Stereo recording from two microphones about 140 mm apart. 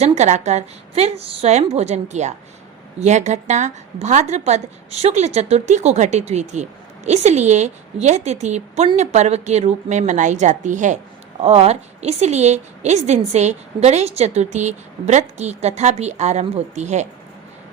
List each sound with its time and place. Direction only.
0.0 s a woman's voice: 55° right (ahead or behind)
11.3 s a woman's voice: 50° right (ahead or behind)